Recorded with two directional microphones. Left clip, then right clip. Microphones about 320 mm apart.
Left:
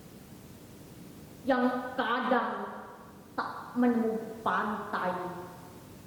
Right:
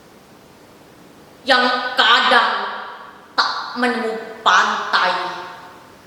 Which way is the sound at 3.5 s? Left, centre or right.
Centre.